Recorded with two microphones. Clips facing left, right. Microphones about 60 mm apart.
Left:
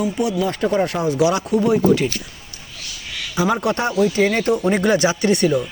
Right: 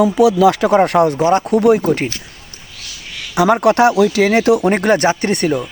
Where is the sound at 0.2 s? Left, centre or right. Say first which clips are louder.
Right 10 dB; right.